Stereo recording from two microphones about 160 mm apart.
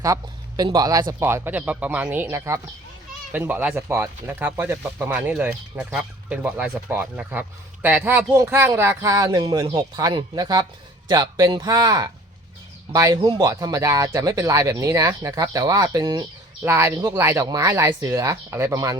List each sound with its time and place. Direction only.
0.0 s speech: 20° right (ahead or behind)